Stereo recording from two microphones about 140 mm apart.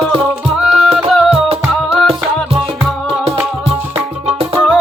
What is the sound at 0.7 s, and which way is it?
Music, 5° right (ahead or behind).